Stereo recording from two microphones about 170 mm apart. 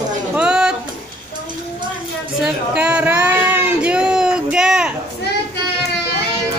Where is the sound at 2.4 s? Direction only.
5° right (ahead or behind).